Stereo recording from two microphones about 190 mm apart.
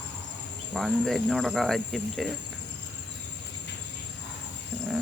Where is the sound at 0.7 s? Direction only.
Centre (ahead or behind).